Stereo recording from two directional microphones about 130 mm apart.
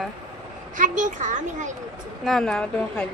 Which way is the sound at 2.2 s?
5° left (ahead or behind).